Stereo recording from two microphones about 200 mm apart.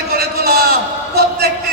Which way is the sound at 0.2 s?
50° right (ahead or behind).